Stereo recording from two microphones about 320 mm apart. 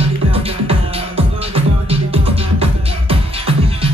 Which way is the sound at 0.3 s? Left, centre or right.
Centre.